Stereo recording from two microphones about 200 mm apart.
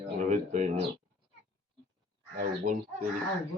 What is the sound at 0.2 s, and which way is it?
Speech, 35° right (ahead or behind).